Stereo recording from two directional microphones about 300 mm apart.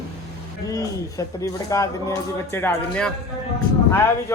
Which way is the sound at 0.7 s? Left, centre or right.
Centre.